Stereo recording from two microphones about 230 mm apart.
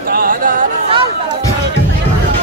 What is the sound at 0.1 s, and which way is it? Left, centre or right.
Chatter, right.